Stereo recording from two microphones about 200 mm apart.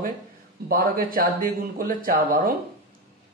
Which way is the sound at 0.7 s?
45° right (ahead or behind).